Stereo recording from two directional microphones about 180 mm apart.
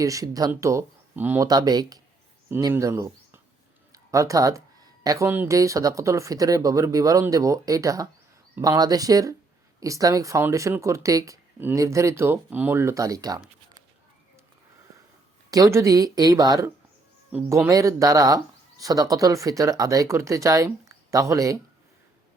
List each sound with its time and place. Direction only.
0.0 s speech: 20° right (ahead or behind)
1.5 s speech: 20° right (ahead or behind)
15.4 s speech: 20° right (ahead or behind)